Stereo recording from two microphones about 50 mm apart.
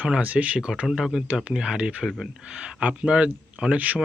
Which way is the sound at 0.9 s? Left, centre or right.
Centre.